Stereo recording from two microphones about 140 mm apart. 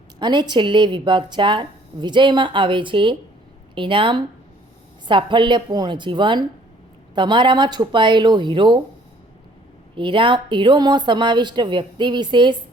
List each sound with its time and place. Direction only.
0.2 s speech: 30° right (ahead or behind)
9.9 s speech: 35° right (ahead or behind)